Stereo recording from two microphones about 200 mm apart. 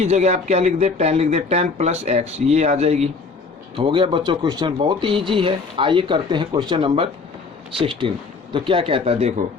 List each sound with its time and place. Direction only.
0.0 s speech: 35° right (ahead or behind)